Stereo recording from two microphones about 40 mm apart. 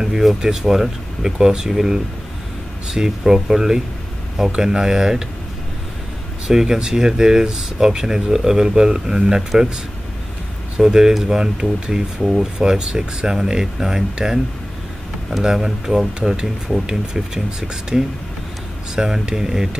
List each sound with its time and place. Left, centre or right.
0.0 s speech: centre
6.4 s speech: centre
10.8 s speech: centre
15.4 s speech: centre